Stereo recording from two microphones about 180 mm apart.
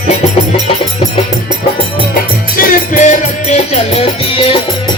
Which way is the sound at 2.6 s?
50° left (ahead or behind).